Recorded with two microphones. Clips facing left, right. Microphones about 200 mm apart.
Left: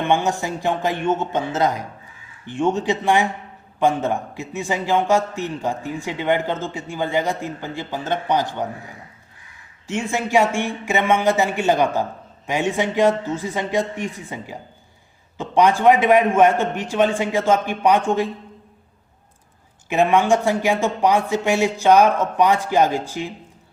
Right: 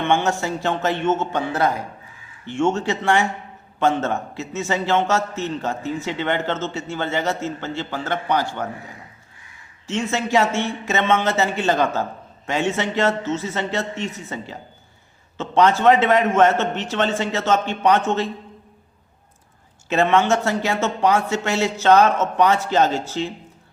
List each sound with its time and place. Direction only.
0.0 s a man's voice: 15° left (ahead or behind)
9.8 s a man's voice: 15° left (ahead or behind)
19.9 s a man's voice: 15° left (ahead or behind)